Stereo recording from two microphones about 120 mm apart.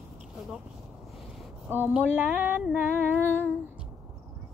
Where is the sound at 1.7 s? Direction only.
15° right (ahead or behind).